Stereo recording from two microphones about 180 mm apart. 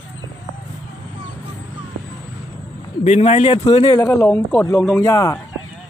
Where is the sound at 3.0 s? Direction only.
40° left (ahead or behind).